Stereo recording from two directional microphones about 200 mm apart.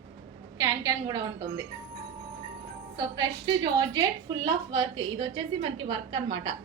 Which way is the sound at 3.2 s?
20° right (ahead or behind).